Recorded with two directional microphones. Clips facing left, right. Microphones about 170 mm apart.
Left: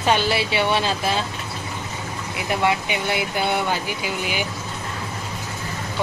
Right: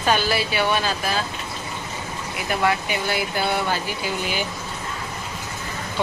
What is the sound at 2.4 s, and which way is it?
Speech, 20° left (ahead or behind).